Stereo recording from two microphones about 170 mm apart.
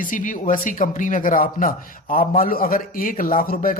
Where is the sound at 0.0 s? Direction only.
50° left (ahead or behind).